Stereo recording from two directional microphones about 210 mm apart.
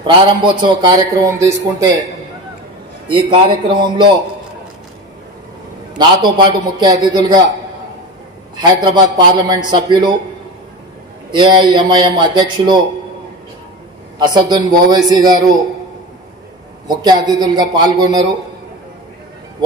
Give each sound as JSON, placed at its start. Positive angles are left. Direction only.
{"t": 0.0, "sound": "a man's voice", "side_deg": -20}
{"t": 3.1, "sound": "a man's voice", "side_deg": -20}
{"t": 5.9, "sound": "a man's voice", "side_deg": -20}
{"t": 8.5, "sound": "a man's voice", "side_deg": -20}
{"t": 11.3, "sound": "a man's voice", "side_deg": -20}
{"t": 14.1, "sound": "a man's voice", "side_deg": -20}
{"t": 16.8, "sound": "a man's voice", "side_deg": -20}